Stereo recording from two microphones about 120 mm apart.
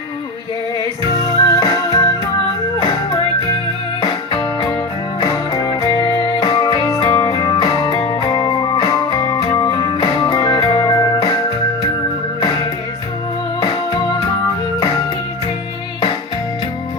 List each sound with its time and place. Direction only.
1.1 s music: 30° left (ahead or behind)
4.3 s music: 35° left (ahead or behind)
7.1 s music: 20° left (ahead or behind)
7.3 s music: 35° left (ahead or behind)